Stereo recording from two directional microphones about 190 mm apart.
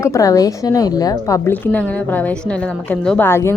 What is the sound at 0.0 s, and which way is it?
A woman's voice, 15° left (ahead or behind).